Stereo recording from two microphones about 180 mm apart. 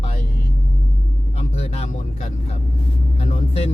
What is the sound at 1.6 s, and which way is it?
A man's voice, 35° left (ahead or behind).